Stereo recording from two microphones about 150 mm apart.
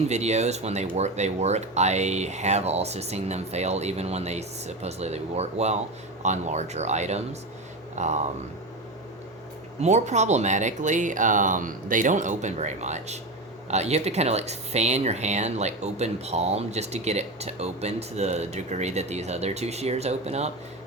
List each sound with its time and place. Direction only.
0.1 s speech: 50° right (ahead or behind)
9.8 s speech: 50° right (ahead or behind)